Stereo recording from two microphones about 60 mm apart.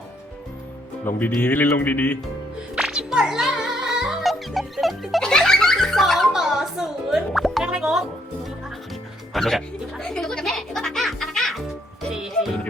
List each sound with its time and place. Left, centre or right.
1.0 s speech: left
2.8 s music: centre
5.2 s music: centre
7.6 s music: centre
9.3 s music: centre
12.1 s music: centre